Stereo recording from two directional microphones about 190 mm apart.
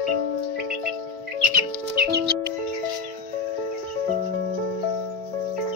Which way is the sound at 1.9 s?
50° right (ahead or behind).